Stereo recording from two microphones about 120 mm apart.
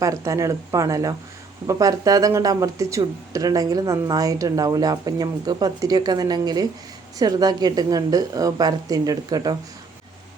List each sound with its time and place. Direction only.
0.0 s speech: 25° right (ahead or behind)